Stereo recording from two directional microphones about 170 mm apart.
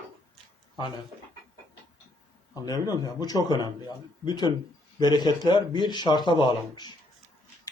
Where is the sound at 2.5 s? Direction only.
20° left (ahead or behind).